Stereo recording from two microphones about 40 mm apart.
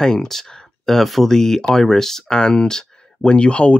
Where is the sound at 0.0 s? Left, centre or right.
Centre.